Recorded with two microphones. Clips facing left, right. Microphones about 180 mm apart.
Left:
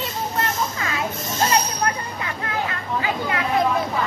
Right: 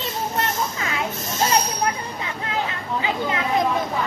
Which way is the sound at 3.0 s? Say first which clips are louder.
Even; 20° right (ahead or behind).